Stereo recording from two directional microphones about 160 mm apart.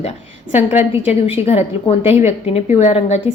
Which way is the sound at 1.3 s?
40° left (ahead or behind).